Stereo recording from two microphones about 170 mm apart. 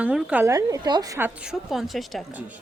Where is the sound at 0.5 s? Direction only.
20° right (ahead or behind).